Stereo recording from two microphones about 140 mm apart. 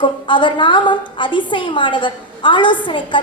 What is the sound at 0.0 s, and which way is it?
A woman's voice, 35° left (ahead or behind).